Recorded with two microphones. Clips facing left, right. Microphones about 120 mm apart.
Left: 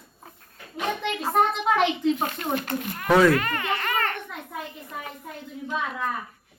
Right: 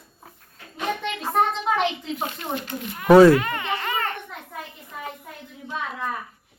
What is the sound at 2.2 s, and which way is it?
Speech, 55° left (ahead or behind).